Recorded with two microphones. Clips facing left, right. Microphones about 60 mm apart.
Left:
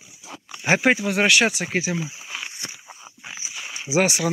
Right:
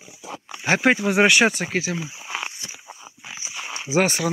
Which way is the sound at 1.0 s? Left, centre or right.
Centre.